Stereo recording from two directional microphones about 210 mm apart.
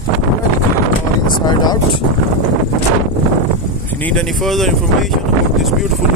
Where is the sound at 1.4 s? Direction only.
20° left (ahead or behind).